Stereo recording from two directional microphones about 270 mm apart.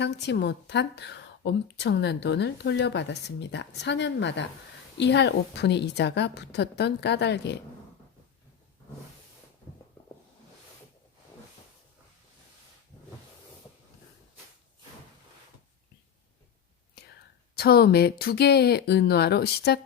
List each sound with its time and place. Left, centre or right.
0.0 s a woman's voice: left
17.6 s a woman's voice: left